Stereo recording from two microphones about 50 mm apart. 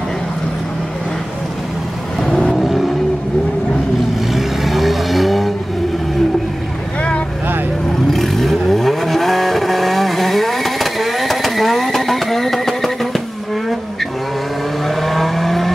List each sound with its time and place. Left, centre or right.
2.1 s vehicle: centre
2.6 s vehicle: centre
4.3 s vehicle: centre
7.0 s boat: left
8.1 s vehicle: centre
14.9 s vehicle: centre